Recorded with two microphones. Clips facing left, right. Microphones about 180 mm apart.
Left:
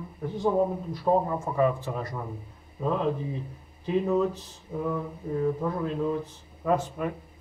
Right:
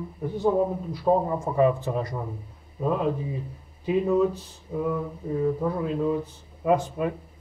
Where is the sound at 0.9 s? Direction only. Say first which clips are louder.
Right 2 dB; 10° right (ahead or behind).